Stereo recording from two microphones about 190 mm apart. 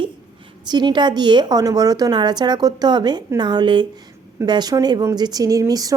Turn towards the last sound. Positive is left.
turn(degrees=-20)  # may be behind; listen again after turning